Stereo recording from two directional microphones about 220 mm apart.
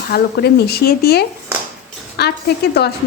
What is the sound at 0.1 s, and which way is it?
Sizzle, 45° left (ahead or behind).